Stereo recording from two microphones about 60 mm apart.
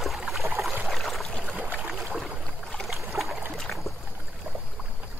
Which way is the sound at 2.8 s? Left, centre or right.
Centre.